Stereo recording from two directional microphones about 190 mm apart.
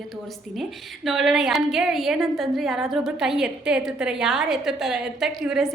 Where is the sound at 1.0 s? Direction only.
Centre (ahead or behind).